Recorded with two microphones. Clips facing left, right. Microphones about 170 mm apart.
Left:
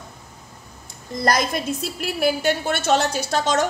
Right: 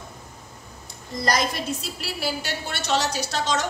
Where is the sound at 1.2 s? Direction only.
50° left (ahead or behind).